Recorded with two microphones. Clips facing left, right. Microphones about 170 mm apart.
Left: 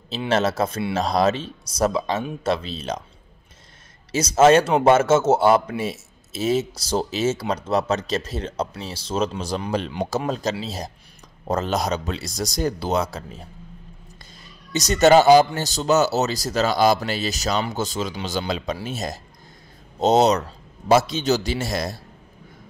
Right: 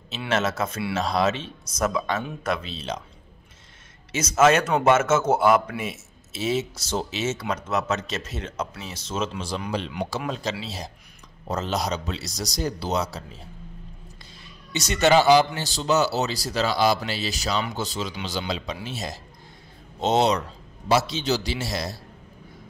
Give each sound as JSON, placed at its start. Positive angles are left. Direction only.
{"t": 0.3, "sound": "a man's voice", "side_deg": 35}
{"t": 4.1, "sound": "a man's voice", "side_deg": 35}
{"t": 14.7, "sound": "a man's voice", "side_deg": 40}